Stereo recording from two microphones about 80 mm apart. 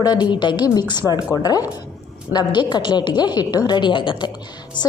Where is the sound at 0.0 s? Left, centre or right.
Left.